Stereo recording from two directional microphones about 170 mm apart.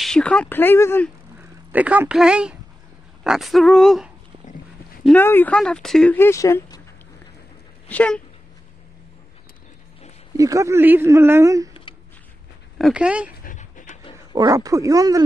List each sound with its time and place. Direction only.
0.0 s speech: 5° left (ahead or behind)
1.7 s speech: 10° right (ahead or behind); by 6.8 s 20° left (ahead or behind)
7.9 s speech: 5° left (ahead or behind)
10.3 s speech: 20° right (ahead or behind)
12.7 s speech: 5° right (ahead or behind)
13.4 s dog: 50° left (ahead or behind)
14.3 s speech: 20° right (ahead or behind)